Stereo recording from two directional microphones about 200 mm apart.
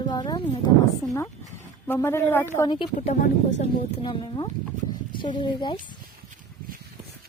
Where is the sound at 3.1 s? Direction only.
40° left (ahead or behind).